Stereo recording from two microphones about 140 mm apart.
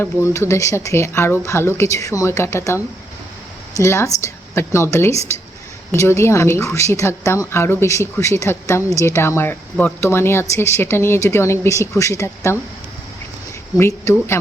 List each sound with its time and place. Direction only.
0.0 s a woman's voice: 20° left (ahead or behind)
13.7 s a woman's voice: 20° left (ahead or behind)